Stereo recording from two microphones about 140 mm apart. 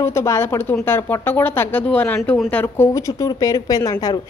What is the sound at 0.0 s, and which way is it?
Speech, 20° left (ahead or behind).